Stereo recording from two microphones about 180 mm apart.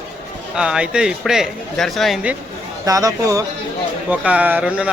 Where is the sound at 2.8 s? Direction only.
20° right (ahead or behind).